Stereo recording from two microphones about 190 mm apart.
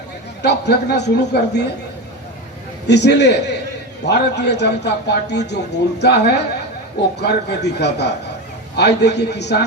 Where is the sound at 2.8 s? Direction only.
65° left (ahead or behind).